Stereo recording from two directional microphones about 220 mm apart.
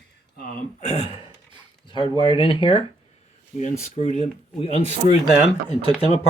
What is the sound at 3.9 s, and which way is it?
Speech, 30° left (ahead or behind).